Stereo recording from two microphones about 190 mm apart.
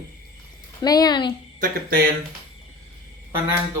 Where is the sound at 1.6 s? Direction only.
50° right (ahead or behind).